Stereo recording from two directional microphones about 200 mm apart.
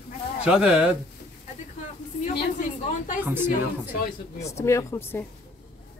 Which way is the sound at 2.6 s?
40° left (ahead or behind).